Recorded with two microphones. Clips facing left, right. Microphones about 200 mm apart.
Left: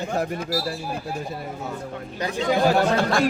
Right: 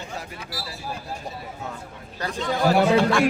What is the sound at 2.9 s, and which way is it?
Speech, 40° left (ahead or behind).